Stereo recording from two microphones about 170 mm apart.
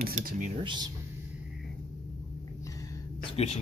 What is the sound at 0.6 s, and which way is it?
Speech, 25° right (ahead or behind).